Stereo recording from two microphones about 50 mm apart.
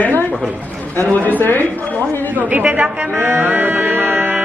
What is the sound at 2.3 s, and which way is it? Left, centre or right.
Speech, right.